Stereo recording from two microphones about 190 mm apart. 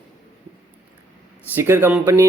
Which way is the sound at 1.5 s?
10° right (ahead or behind).